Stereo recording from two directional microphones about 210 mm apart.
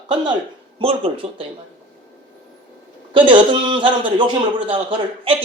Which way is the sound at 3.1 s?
20° right (ahead or behind).